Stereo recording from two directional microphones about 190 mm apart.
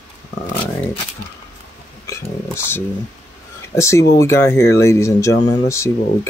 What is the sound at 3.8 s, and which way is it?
Speech, 15° left (ahead or behind).